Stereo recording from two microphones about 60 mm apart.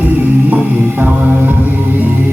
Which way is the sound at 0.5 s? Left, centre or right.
Right.